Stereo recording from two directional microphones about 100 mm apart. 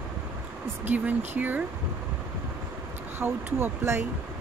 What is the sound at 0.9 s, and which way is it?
Speech, 15° right (ahead or behind).